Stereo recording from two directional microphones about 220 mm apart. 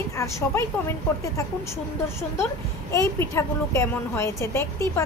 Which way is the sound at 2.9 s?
10° left (ahead or behind).